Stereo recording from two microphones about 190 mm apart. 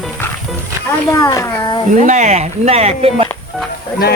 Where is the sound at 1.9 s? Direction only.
40° right (ahead or behind).